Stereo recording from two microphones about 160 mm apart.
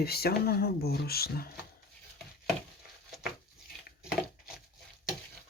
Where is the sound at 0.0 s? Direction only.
75° left (ahead or behind).